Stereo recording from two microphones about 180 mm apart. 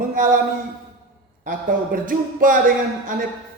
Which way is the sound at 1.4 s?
50° right (ahead or behind).